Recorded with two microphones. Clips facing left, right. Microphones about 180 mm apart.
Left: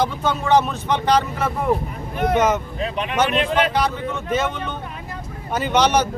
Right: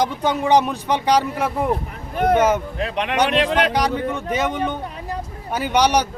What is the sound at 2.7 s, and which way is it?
Speech, 70° right (ahead or behind).